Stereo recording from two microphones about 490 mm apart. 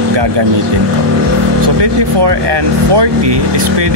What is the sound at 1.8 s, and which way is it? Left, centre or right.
Speech, right.